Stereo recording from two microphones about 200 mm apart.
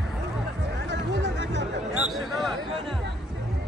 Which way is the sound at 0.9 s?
65° right (ahead or behind).